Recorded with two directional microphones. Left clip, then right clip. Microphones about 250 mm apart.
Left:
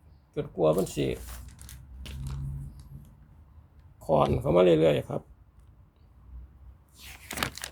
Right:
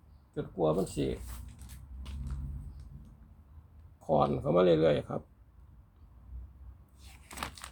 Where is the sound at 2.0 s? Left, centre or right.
Left.